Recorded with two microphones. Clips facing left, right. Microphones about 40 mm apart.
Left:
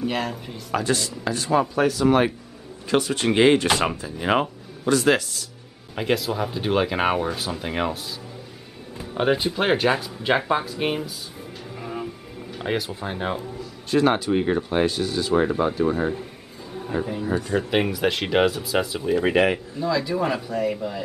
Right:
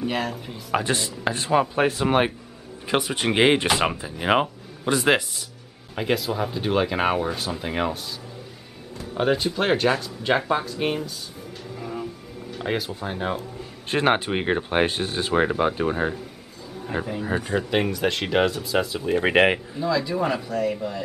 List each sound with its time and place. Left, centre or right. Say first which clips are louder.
0.0 s speech: even; centre
0.7 s speech: even; right
5.9 s speech: left 1 dB; centre
9.1 s speech: left 1 dB; centre
11.7 s music: even; centre
13.6 s speech: left 8 dB; right
17.2 s speech: left 1 dB; right
17.6 s speech: left 1 dB; centre
19.2 s speech: right 2 dB; right
19.8 s speech: left 1 dB; centre